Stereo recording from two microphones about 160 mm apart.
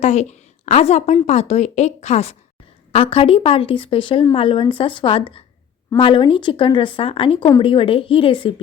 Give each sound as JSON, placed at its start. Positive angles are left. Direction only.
{"t": 0.0, "sound": "a woman's voice", "side_deg": 45}